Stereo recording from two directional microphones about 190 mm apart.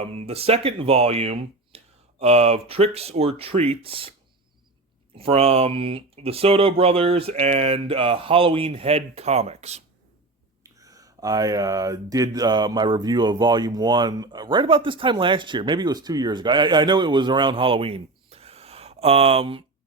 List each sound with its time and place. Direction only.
0.0 s speech: 30° right (ahead or behind)
5.1 s speech: 30° right (ahead or behind)
10.6 s speech: 20° right (ahead or behind)